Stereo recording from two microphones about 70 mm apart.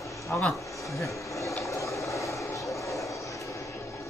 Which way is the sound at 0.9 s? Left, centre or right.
Left.